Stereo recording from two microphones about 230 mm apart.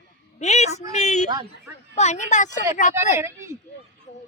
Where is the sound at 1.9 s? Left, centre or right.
Left.